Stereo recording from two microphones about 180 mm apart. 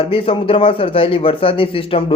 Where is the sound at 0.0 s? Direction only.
30° left (ahead or behind).